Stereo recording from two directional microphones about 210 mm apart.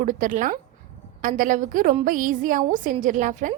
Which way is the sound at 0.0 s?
40° right (ahead or behind).